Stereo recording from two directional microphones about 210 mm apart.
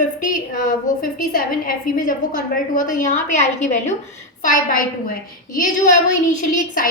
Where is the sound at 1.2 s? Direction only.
45° left (ahead or behind).